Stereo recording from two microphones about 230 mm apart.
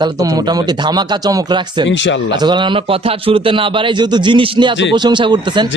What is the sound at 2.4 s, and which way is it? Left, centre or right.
Speech, centre.